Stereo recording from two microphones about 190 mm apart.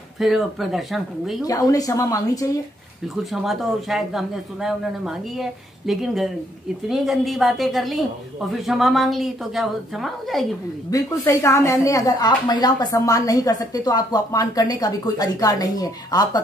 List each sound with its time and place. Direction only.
0.2 s a man's voice: centre (ahead or behind)
1.4 s a woman's voice: 20° left (ahead or behind)
3.3 s a man's voice: centre (ahead or behind)
10.9 s a woman's voice: 20° left (ahead or behind)